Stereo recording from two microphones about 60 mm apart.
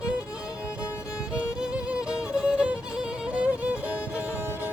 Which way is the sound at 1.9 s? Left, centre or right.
Centre.